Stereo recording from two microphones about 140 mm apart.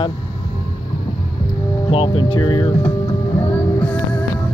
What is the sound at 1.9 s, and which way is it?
Speech, 40° left (ahead or behind).